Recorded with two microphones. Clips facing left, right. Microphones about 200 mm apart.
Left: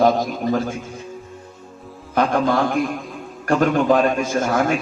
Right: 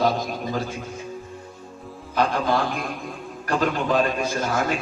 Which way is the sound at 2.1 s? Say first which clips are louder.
Left 4 dB; 50° left (ahead or behind).